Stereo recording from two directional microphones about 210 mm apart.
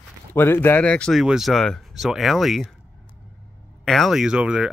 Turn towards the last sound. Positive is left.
turn(degrees=-5)  # may be behind; listen again after turning